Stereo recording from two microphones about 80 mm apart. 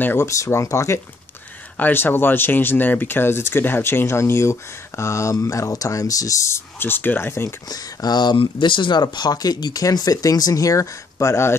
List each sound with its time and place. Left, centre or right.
0.0 s speech: left
0.3 s speech: left
1.8 s speech: left
7.4 s speech: left